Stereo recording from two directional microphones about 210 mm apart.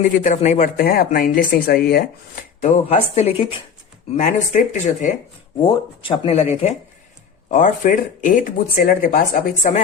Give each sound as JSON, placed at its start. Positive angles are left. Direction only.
{"t": 0.0, "sound": "speech", "side_deg": 40}
{"t": 5.6, "sound": "speech", "side_deg": 25}